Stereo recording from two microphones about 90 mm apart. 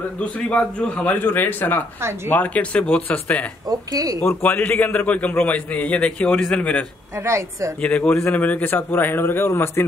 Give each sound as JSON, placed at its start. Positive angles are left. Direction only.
{"t": 0.2, "sound": "a man's voice", "side_deg": 10}
{"t": 3.6, "sound": "speech", "side_deg": -45}
{"t": 4.2, "sound": "a man's voice", "side_deg": 20}
{"t": 7.2, "sound": "a woman's voice", "side_deg": -35}
{"t": 7.8, "sound": "a man's voice", "side_deg": 10}